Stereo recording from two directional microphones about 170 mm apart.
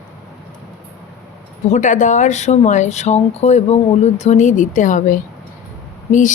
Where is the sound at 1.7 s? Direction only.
50° left (ahead or behind).